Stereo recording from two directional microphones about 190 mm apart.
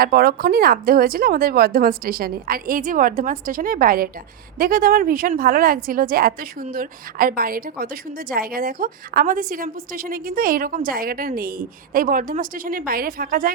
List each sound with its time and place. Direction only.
0.0 s a woman's voice: 50° right (ahead or behind)